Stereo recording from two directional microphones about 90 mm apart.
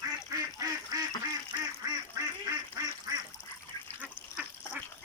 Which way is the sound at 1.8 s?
40° right (ahead or behind).